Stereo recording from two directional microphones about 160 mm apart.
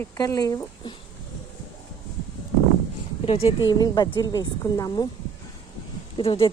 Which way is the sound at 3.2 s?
40° left (ahead or behind).